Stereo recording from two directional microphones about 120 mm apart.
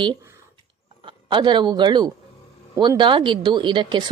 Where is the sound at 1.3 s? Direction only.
40° right (ahead or behind).